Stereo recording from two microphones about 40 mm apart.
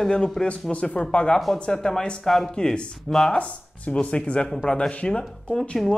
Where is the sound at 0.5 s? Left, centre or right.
Left; by 2.5 s centre.